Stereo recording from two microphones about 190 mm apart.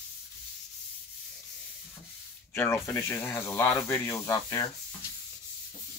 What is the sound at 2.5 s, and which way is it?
Speech, 10° left (ahead or behind).